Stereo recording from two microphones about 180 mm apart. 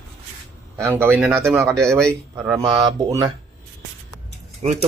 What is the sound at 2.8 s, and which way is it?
Speech, 20° right (ahead or behind).